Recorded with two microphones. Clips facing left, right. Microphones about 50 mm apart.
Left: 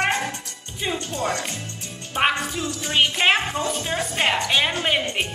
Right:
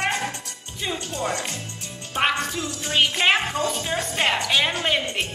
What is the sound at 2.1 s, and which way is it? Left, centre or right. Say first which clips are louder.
Music: left 1 dB; centre.